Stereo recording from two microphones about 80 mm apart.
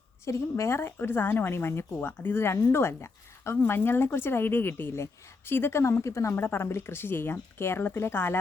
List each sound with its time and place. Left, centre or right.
0.3 s speech: left